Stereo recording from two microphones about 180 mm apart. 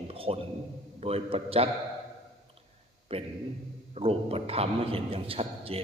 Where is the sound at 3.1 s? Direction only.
30° right (ahead or behind).